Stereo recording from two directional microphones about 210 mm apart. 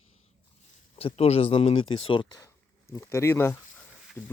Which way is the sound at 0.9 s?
30° left (ahead or behind).